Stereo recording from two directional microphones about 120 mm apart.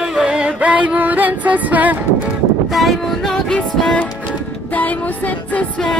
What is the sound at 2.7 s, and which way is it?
Music, centre (ahead or behind).